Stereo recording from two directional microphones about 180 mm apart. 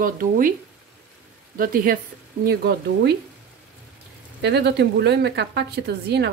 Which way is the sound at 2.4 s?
60° right (ahead or behind).